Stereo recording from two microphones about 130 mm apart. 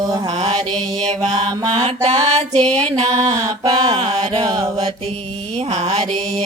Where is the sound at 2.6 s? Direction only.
5° left (ahead or behind).